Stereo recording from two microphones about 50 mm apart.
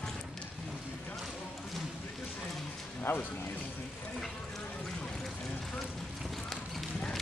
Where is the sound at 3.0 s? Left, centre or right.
Left.